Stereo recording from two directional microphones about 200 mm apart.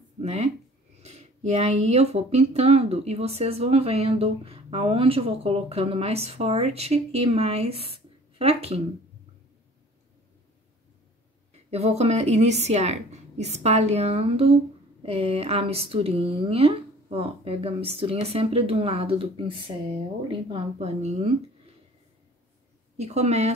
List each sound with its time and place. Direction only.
0.2 s speech: 35° right (ahead or behind)
11.7 s speech: 30° right (ahead or behind)
22.9 s speech: 35° right (ahead or behind)